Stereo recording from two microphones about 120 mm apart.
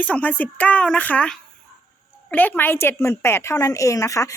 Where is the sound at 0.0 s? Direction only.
10° left (ahead or behind).